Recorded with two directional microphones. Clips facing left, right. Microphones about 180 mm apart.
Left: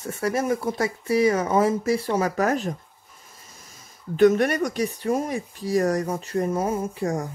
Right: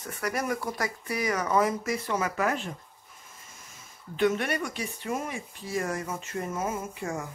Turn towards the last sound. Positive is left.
turn(degrees=35)  # may be behind; listen again after turning